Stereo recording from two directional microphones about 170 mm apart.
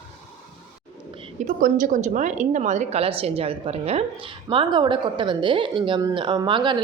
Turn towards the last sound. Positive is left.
turn(degrees=-30)  # may be behind; listen again after turning